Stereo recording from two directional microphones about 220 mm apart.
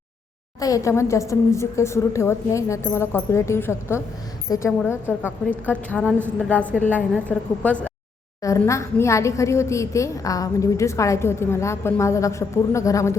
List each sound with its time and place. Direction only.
0.6 s a woman's voice: 15° left (ahead or behind)